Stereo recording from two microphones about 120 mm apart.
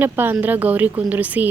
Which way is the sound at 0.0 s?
15° right (ahead or behind).